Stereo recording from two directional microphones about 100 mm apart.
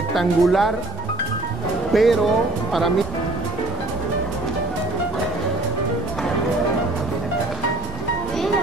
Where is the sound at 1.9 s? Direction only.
Centre (ahead or behind).